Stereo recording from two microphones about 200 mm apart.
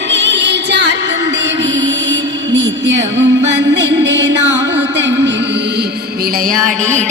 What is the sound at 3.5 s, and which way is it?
Music, 60° right (ahead or behind).